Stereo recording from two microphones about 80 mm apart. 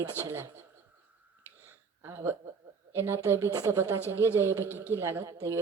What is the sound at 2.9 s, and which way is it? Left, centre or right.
A man's voice, right.